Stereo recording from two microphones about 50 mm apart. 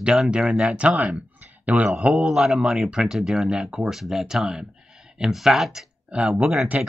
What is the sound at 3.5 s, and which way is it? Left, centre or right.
Speech, centre.